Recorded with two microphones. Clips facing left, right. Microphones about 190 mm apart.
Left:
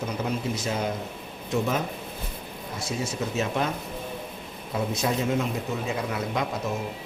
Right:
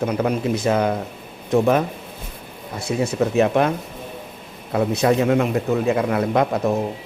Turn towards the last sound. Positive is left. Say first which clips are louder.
# right 9 dB
turn(degrees=-60)  # may be behind; listen again after turning